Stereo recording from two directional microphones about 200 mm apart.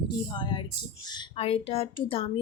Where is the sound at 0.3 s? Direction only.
20° left (ahead or behind).